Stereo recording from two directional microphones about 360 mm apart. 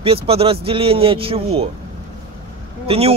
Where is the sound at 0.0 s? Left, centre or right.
Centre.